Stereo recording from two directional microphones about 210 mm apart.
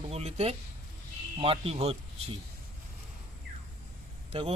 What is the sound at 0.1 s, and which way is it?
Speech, 30° right (ahead or behind).